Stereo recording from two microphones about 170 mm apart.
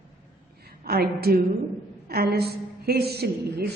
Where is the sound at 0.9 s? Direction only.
65° right (ahead or behind).